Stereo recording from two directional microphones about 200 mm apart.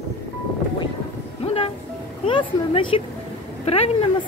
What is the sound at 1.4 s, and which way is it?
Music, 30° left (ahead or behind).